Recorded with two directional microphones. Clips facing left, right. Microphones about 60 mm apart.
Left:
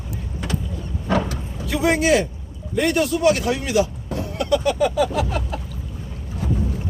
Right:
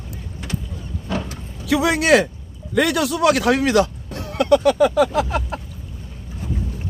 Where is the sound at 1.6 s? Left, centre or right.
Right.